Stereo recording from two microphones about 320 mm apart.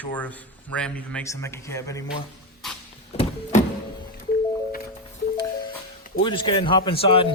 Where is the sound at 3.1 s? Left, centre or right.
Left.